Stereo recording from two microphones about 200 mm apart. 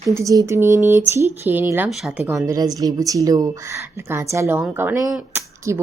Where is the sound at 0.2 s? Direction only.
15° right (ahead or behind).